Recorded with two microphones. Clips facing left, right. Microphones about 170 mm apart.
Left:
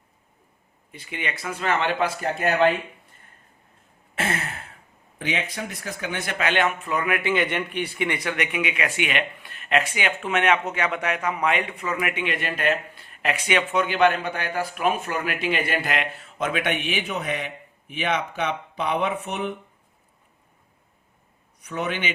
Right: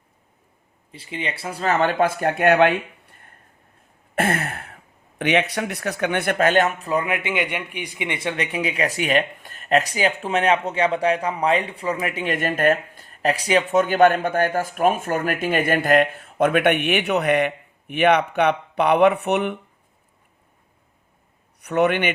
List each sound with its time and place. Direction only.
0.9 s speech: 30° right (ahead or behind); by 2.7 s 65° right (ahead or behind)
4.1 s a sound: 50° right (ahead or behind)
5.1 s speech: 70° right (ahead or behind)
21.6 s a man's voice: 65° right (ahead or behind)